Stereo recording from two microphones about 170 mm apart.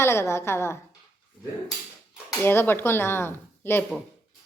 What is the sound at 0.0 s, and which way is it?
Speech, 15° left (ahead or behind).